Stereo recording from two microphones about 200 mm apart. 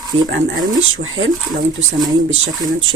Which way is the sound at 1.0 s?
90° right.